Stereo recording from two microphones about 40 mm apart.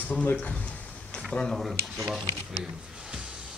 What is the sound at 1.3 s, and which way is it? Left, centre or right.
Speech, left.